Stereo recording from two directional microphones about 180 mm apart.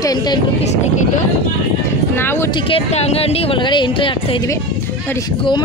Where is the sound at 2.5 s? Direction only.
30° left (ahead or behind).